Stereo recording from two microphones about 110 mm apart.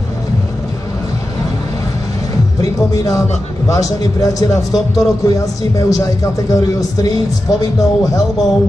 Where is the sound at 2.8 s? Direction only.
30° left (ahead or behind).